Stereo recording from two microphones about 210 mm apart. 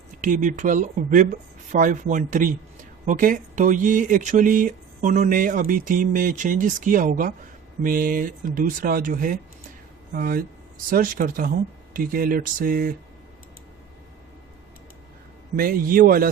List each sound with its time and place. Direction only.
0.2 s speech: 40° right (ahead or behind)
15.5 s speech: 40° right (ahead or behind)